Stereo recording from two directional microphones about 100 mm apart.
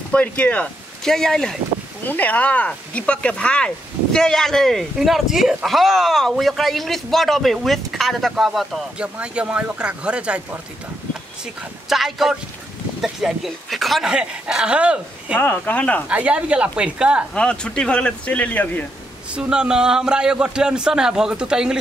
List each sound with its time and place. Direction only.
0.1 s speech: 15° left (ahead or behind)
2.0 s a man's voice: 15° left (ahead or behind); by 10.6 s 10° right (ahead or behind)
11.9 s speech: centre (ahead or behind)
15.4 s stir: 20° left (ahead or behind)
16.1 s a man's voice: 10° right (ahead or behind)
17.3 s stir: 10° left (ahead or behind)
19.3 s a man's voice: 10° right (ahead or behind)